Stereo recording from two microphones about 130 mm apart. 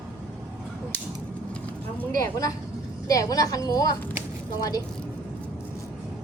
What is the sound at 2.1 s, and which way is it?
A woman's voice, 25° left (ahead or behind).